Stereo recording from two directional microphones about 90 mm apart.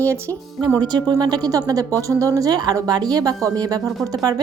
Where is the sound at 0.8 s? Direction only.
50° right (ahead or behind).